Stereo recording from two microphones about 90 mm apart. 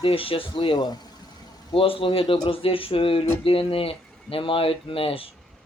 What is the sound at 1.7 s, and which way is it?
Speech, 90° left.